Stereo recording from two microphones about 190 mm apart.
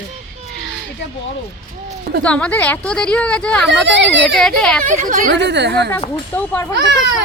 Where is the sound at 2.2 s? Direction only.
5° left (ahead or behind).